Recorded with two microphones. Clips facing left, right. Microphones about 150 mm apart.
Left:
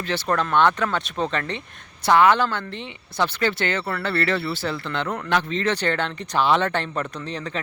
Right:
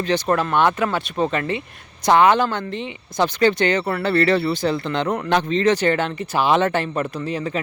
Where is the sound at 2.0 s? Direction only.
20° right (ahead or behind).